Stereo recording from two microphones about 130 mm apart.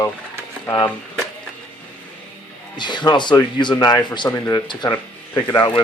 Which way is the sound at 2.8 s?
35° left (ahead or behind).